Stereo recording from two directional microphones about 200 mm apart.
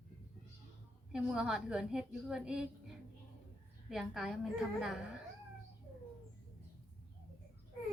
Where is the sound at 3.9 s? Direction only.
Centre (ahead or behind).